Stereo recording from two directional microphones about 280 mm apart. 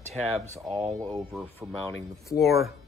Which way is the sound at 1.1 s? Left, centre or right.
Centre.